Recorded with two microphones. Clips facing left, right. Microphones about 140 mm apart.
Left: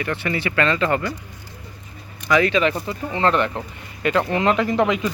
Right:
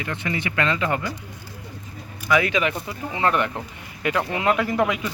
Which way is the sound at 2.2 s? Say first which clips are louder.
Left 3 dB; 10° right (ahead or behind).